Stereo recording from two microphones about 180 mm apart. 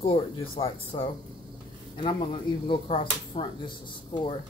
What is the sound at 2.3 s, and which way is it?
Speech, 30° left (ahead or behind).